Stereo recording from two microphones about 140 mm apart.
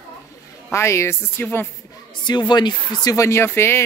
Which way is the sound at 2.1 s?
30° left (ahead or behind).